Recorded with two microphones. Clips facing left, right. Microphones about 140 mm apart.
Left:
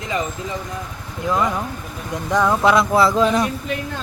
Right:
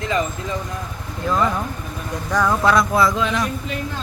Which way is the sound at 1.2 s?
15° left (ahead or behind).